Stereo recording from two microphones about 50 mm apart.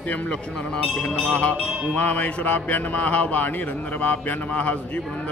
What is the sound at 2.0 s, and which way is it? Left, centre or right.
A man's voice, left.